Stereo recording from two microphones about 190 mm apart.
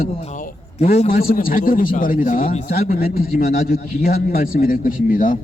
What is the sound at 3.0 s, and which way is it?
Speech, 50° left (ahead or behind).